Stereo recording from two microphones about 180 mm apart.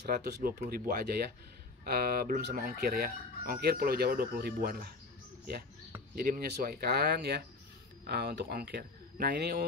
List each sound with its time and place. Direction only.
0.0 s speech: 65° right (ahead or behind)
6.1 s speech: 55° right (ahead or behind)